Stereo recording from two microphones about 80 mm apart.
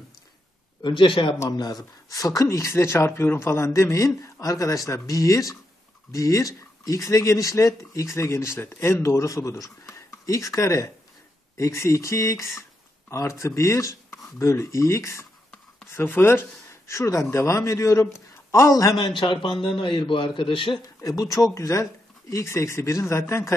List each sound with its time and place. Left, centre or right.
0.8 s a man's voice: left
1.5 s speech: left
18.9 s a man's voice: left
21.0 s speech: left